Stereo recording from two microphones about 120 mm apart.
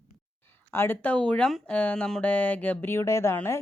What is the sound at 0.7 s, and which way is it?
Speech, 15° left (ahead or behind).